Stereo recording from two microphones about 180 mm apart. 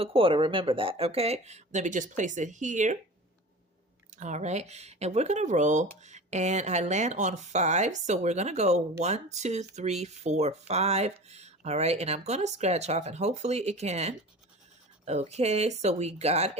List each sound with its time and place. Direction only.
0.0 s speech: 30° right (ahead or behind)
4.1 s speech: 40° right (ahead or behind)